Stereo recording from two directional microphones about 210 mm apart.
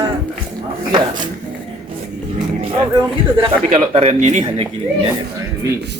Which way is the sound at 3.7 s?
30° right (ahead or behind).